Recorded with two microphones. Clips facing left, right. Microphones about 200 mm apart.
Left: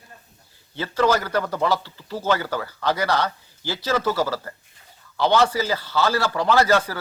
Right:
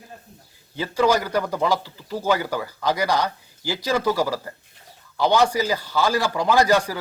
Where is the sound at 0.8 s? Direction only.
15° right (ahead or behind).